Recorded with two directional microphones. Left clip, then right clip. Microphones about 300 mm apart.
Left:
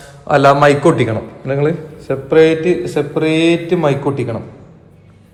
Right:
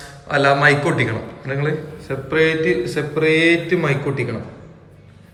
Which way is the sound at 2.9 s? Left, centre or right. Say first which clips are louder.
Left 2 dB; left.